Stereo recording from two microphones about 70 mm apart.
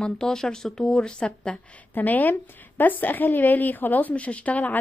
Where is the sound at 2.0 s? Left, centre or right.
Left.